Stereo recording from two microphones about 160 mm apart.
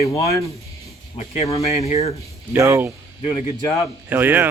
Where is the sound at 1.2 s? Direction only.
40° left (ahead or behind).